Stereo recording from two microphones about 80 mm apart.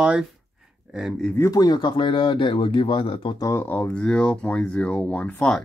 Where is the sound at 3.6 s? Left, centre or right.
Centre.